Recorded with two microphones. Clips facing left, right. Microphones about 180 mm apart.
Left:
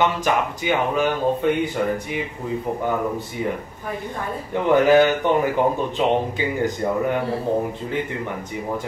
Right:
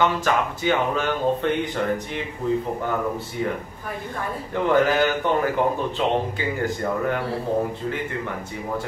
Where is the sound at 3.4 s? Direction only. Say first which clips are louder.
Right 1 dB; 15° left (ahead or behind).